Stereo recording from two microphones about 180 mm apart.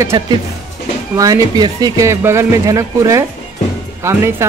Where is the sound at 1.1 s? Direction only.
20° right (ahead or behind).